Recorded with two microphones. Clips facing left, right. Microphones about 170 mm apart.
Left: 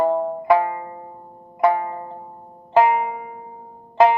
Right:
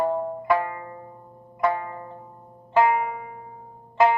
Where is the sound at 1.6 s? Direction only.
20° left (ahead or behind).